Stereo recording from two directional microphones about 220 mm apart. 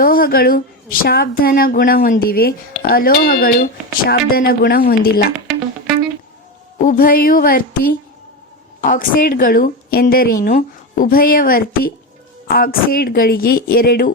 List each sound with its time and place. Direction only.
0.0 s a woman's voice: 40° left (ahead or behind)
5.5 s music: centre (ahead or behind)
6.8 s a woman's voice: 40° left (ahead or behind)